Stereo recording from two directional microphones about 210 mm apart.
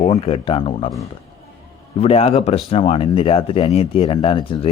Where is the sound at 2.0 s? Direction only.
30° left (ahead or behind).